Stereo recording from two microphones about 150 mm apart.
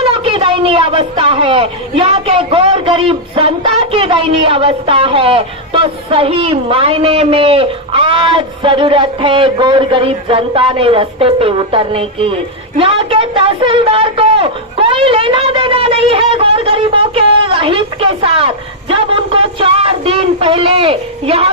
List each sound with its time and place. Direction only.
0.0 s speech: 35° right (ahead or behind)